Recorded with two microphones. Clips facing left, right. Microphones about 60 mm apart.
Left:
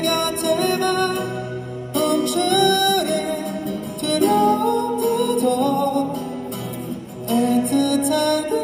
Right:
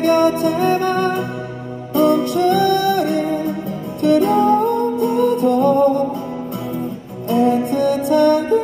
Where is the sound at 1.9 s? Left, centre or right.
Left.